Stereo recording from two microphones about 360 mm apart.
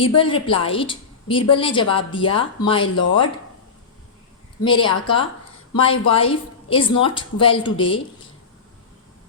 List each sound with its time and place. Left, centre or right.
0.2 s a woman's voice: centre
2.8 s speech: left
4.6 s a woman's voice: centre